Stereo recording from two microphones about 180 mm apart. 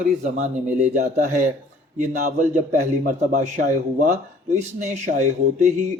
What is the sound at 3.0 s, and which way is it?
Speech, 50° right (ahead or behind).